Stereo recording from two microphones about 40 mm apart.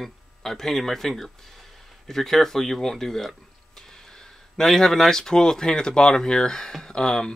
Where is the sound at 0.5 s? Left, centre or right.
Centre.